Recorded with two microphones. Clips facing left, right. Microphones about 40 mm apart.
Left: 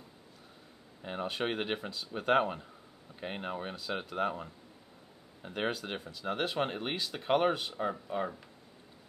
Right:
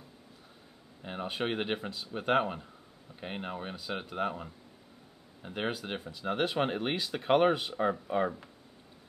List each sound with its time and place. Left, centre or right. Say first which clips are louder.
1.0 s speech: even; centre